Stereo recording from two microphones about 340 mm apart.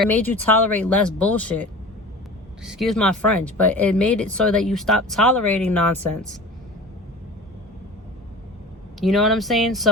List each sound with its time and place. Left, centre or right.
0.1 s speech: centre
2.6 s speech: centre
9.0 s speech: centre